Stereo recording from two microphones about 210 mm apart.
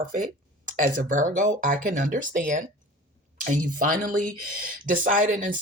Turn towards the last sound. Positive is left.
turn(degrees=-40)  # may be behind; listen again after turning